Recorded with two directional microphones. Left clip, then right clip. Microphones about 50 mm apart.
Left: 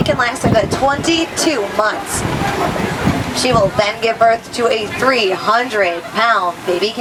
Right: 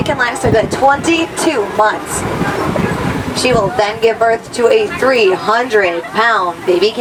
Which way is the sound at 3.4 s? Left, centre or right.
Centre.